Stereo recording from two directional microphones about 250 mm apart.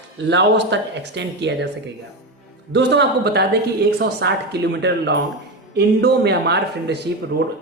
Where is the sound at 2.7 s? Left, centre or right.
Right.